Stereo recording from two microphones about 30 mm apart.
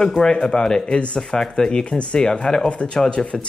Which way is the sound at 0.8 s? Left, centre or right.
Left.